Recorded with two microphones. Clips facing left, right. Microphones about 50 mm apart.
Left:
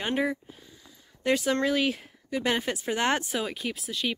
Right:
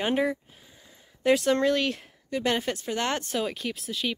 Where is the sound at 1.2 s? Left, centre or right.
Centre.